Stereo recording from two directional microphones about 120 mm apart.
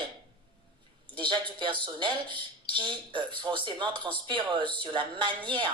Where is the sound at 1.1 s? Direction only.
40° right (ahead or behind).